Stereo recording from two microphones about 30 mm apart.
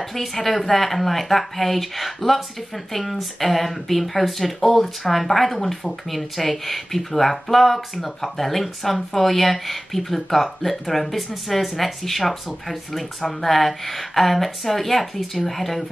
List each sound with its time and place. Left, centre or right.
0.0 s speech: centre